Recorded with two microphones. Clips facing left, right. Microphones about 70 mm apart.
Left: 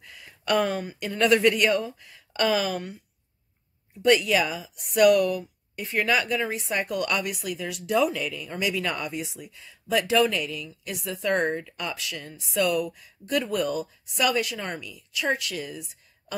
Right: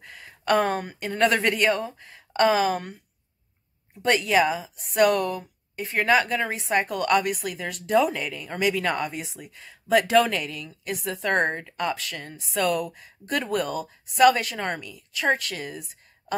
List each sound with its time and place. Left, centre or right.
0.0 s speech: right
4.0 s speech: right